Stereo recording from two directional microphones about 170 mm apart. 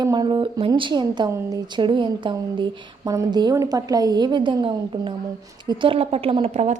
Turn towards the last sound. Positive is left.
turn(degrees=-40)  # may be behind; listen again after turning